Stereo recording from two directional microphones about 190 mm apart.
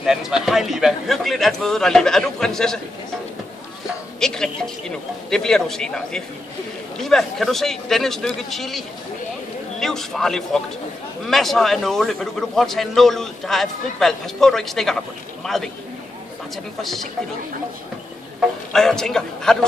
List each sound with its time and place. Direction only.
0.0 s a man's voice: centre (ahead or behind)
4.2 s a man's voice: 5° left (ahead or behind)
18.7 s a man's voice: centre (ahead or behind)